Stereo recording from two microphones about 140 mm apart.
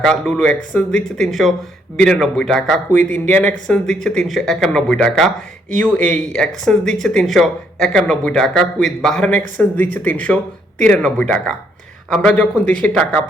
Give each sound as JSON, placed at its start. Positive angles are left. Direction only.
{"t": 0.0, "sound": "speech", "side_deg": 5}
{"t": 6.3, "sound": "speech", "side_deg": 5}